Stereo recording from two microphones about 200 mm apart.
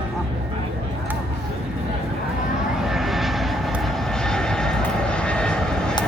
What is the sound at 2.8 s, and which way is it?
Vehicle, centre (ahead or behind).